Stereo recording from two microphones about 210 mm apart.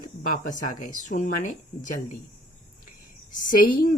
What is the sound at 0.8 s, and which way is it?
Speech, 35° left (ahead or behind).